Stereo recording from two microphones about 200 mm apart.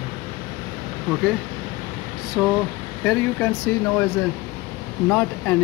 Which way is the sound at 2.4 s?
Centre (ahead or behind).